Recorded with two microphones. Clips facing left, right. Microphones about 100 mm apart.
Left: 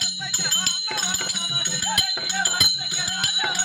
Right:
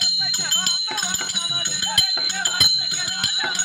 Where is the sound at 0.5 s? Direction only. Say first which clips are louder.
Right 1 dB; 5° right (ahead or behind).